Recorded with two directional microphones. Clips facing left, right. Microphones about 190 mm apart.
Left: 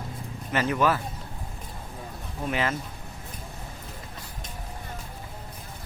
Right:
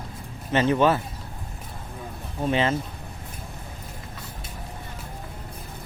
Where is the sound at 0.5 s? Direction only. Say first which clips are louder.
Right 4 dB; 25° right (ahead or behind).